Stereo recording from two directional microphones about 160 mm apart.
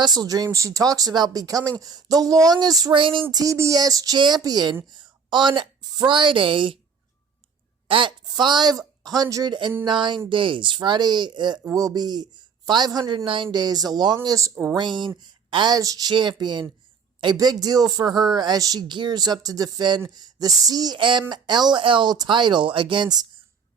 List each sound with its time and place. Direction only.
0.0 s speech: 25° right (ahead or behind)
3.3 s a woman's voice: 20° right (ahead or behind)
7.9 s speech: 30° right (ahead or behind)
14.8 s speech: 30° right (ahead or behind)